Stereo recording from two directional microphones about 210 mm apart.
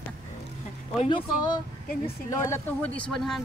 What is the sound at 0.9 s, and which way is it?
Speech, 20° left (ahead or behind).